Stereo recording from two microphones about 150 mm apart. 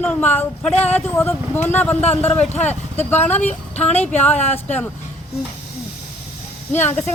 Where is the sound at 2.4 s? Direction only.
50° left (ahead or behind).